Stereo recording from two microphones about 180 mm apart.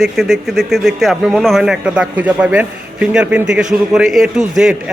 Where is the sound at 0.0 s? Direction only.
Centre (ahead or behind).